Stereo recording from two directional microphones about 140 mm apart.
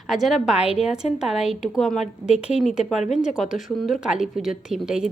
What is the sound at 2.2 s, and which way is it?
Speech, 55° left (ahead or behind).